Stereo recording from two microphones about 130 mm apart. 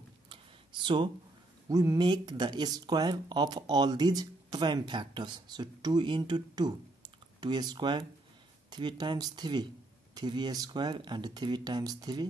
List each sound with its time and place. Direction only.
0.8 s speech: 40° right (ahead or behind)
1.7 s speech: 25° right (ahead or behind)